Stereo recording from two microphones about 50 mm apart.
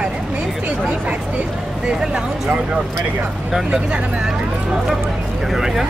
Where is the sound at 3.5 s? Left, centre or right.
Centre.